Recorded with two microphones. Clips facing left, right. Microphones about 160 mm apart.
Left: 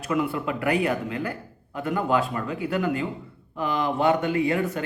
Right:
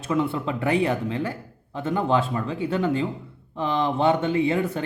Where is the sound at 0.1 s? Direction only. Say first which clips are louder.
Right 1 dB; 25° right (ahead or behind).